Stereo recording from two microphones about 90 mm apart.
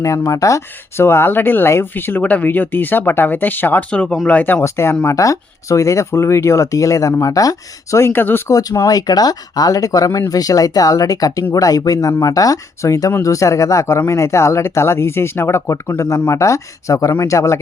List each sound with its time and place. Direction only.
0.0 s speech: 35° left (ahead or behind); by 4.6 s 15° left (ahead or behind)
4.6 s speech: 30° left (ahead or behind)
8.4 s speech: 35° left (ahead or behind)
8.9 s speech: 45° left (ahead or behind)